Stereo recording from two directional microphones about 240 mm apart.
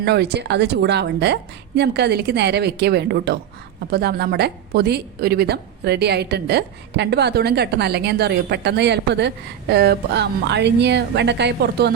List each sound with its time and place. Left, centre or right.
0.0 s a woman's voice: right